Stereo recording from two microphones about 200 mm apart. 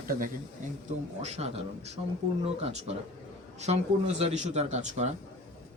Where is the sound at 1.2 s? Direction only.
35° right (ahead or behind).